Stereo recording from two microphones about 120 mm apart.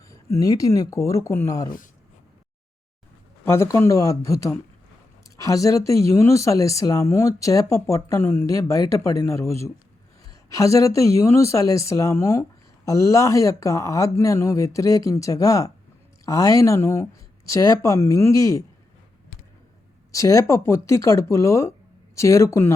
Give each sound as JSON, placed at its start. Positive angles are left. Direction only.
{"t": 0.1, "sound": "speech", "side_deg": 25}
{"t": 3.4, "sound": "speech", "side_deg": 20}
{"t": 20.1, "sound": "speech", "side_deg": 30}